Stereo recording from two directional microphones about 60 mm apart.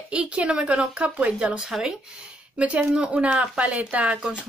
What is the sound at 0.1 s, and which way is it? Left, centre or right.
Speech, centre.